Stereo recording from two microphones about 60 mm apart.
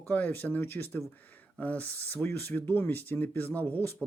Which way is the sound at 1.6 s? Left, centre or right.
Left.